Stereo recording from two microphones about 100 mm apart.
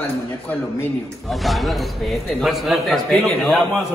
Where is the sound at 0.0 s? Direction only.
20° left (ahead or behind).